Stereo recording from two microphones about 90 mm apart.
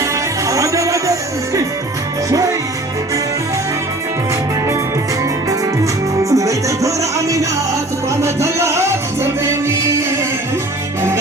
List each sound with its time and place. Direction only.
0.0 s music: 35° right (ahead or behind)
2.3 s music: 40° right (ahead or behind)
5.5 s music: 35° right (ahead or behind)